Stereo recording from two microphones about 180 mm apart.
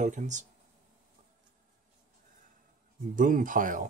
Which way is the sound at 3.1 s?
50° right (ahead or behind).